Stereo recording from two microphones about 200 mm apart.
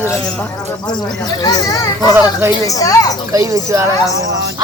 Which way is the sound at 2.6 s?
15° left (ahead or behind).